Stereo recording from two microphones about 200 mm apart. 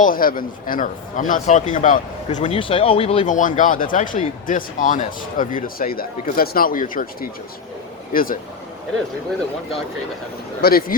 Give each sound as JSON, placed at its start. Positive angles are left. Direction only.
{"t": 0.0, "sound": "speech", "side_deg": 45}
{"t": 10.6, "sound": "speech", "side_deg": 50}